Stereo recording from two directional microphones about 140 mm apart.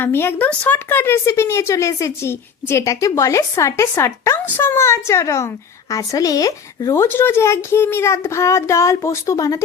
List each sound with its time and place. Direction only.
0.0 s speech: 15° left (ahead or behind)